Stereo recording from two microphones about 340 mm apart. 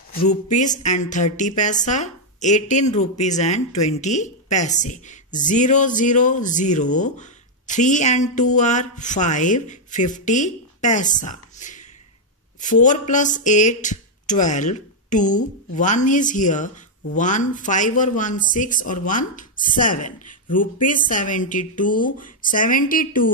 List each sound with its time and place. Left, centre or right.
0.1 s speech: left